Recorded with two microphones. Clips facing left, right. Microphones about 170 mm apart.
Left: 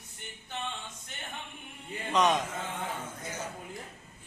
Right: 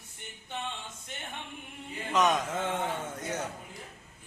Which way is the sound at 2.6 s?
75° right (ahead or behind).